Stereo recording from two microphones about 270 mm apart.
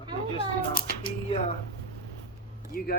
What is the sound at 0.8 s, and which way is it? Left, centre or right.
Speech, left.